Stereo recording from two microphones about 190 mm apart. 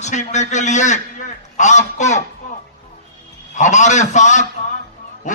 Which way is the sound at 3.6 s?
40° left (ahead or behind).